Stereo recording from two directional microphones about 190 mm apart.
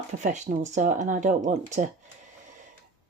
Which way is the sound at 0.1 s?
40° right (ahead or behind).